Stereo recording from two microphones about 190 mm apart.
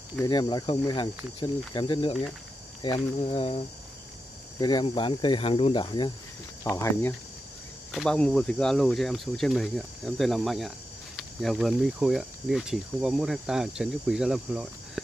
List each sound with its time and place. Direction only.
0.2 s speech: 25° left (ahead or behind)
6.6 s speech: 15° left (ahead or behind); by 14.7 s 5° right (ahead or behind)